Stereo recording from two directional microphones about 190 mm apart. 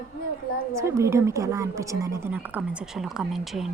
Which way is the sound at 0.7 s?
15° right (ahead or behind).